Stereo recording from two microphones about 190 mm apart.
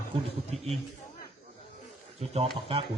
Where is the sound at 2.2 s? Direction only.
35° right (ahead or behind).